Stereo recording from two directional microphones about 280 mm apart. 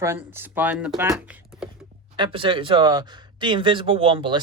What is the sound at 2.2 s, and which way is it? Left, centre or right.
Speech, centre.